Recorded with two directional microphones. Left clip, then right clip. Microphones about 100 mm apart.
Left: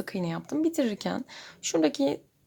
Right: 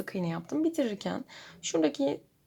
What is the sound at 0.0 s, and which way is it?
Speech, 15° left (ahead or behind).